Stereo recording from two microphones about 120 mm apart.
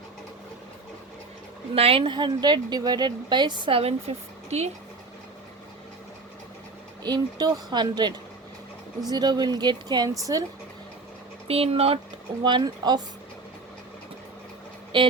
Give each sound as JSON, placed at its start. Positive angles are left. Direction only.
{"t": 1.7, "sound": "a woman's voice", "side_deg": -55}
{"t": 7.0, "sound": "a woman's voice", "side_deg": -35}
{"t": 11.4, "sound": "speech", "side_deg": -55}
{"t": 12.4, "sound": "a woman's voice", "side_deg": -40}
{"t": 14.9, "sound": "a woman's voice", "side_deg": -40}